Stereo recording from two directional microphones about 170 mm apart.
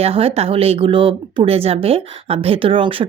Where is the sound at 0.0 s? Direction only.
35° right (ahead or behind).